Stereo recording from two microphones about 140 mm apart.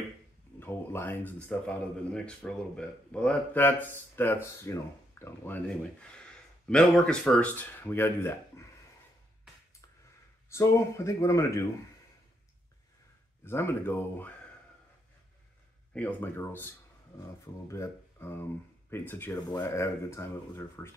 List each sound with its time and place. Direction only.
0.6 s speech: 15° left (ahead or behind)
10.5 s speech: 20° left (ahead or behind)
13.4 s speech: 15° left (ahead or behind)
15.9 s speech: 10° left (ahead or behind)